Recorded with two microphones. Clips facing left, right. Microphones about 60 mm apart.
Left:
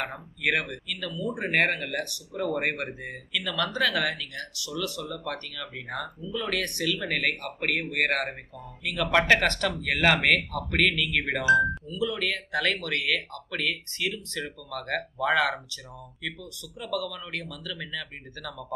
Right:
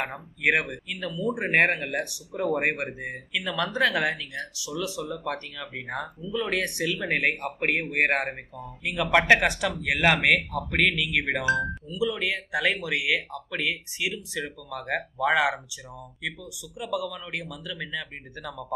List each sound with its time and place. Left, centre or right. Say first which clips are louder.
0.0 s speech: right 3 dB; centre